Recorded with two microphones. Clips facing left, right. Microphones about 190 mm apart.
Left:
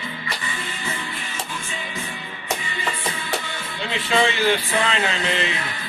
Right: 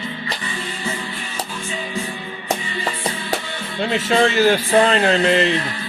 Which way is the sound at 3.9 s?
45° right (ahead or behind).